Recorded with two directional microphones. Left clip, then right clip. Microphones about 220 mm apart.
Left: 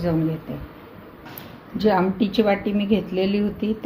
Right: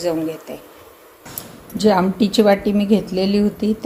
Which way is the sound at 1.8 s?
20° right (ahead or behind).